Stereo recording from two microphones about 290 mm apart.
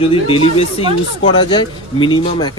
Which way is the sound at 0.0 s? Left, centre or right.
Centre.